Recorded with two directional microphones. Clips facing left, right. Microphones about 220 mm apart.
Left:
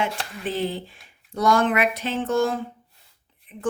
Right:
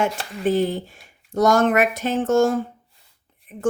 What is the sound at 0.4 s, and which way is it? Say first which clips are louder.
A woman's voice: right 7 dB; 45° right (ahead or behind).